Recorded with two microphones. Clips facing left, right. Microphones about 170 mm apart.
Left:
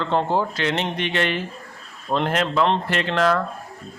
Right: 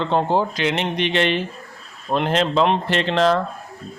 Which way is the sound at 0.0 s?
20° right (ahead or behind).